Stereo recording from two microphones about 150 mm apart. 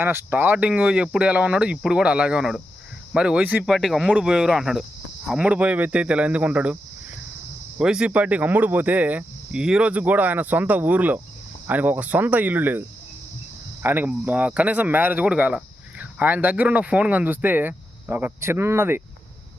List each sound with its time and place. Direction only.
0.0 s speech: 15° right (ahead or behind)
7.8 s speech: 5° right (ahead or behind)
13.8 s speech: 15° right (ahead or behind)